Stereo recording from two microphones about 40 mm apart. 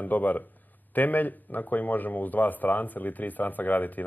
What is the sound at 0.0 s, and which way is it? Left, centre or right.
Speech, left.